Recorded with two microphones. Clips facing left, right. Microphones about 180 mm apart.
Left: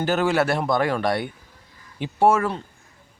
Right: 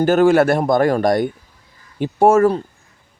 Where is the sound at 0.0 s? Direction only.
50° right (ahead or behind).